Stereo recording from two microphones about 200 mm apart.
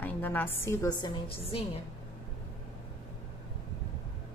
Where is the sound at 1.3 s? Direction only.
30° left (ahead or behind).